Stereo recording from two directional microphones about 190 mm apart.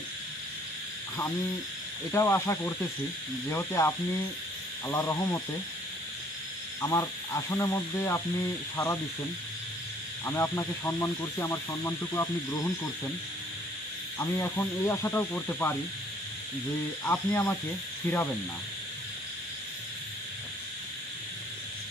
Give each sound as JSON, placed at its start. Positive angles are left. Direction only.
{"t": 2.1, "sound": "speech", "side_deg": 15}
{"t": 6.8, "sound": "speech", "side_deg": 15}
{"t": 10.2, "sound": "speech", "side_deg": 10}
{"t": 14.1, "sound": "speech", "side_deg": 15}
{"t": 17.0, "sound": "speech", "side_deg": 10}